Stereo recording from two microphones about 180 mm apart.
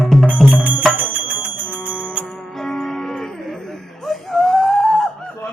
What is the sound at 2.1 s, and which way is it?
Music, centre (ahead or behind).